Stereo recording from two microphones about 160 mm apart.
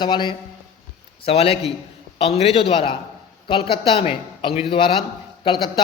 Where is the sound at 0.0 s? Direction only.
30° left (ahead or behind).